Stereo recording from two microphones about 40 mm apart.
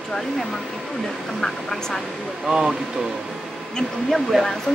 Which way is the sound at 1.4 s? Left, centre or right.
Centre.